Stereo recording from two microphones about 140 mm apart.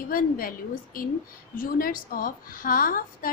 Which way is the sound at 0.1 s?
90° left.